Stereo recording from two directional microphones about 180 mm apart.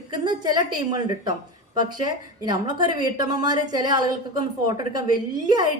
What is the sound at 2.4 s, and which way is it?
A woman's voice, 20° right (ahead or behind).